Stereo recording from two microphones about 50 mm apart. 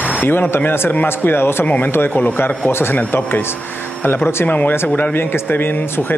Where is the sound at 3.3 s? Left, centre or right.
Left.